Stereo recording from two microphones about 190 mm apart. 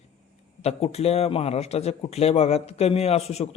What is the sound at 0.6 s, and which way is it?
Speech, 35° left (ahead or behind).